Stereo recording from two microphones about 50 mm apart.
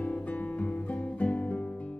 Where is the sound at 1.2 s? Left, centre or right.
Left.